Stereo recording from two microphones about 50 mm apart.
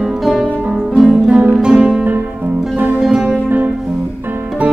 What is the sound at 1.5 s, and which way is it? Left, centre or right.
Music, centre.